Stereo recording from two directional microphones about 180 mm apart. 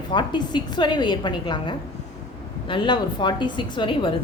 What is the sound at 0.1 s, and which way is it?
A woman's voice, 25° left (ahead or behind).